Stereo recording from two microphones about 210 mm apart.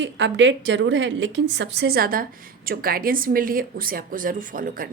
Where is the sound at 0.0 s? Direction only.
60° right (ahead or behind).